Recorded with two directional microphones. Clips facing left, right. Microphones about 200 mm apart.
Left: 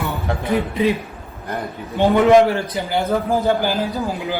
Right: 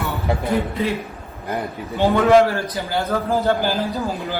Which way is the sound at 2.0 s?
15° left (ahead or behind).